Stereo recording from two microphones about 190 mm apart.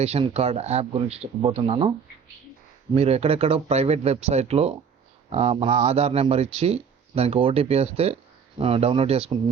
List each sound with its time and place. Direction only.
0.0 s speech: 35° right (ahead or behind)
2.9 s speech: 35° right (ahead or behind)